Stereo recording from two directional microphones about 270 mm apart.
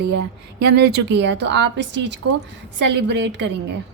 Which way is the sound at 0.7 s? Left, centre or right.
Right.